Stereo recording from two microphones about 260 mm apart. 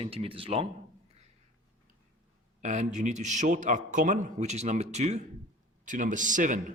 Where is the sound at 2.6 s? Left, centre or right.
Right.